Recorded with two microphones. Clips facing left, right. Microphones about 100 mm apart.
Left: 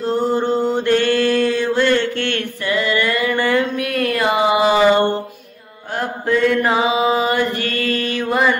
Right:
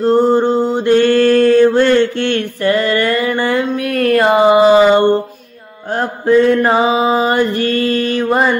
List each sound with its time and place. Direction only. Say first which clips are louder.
0.0 s mantra: right 7 dB; 35° right (ahead or behind)
2.6 s a sound: right 5 dB; 45° right (ahead or behind); by 5.0 s 25° right (ahead or behind)
5.9 s mantra: right 7 dB; 35° right (ahead or behind)